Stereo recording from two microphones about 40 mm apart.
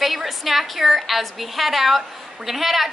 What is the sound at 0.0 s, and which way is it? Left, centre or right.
A woman's voice, centre.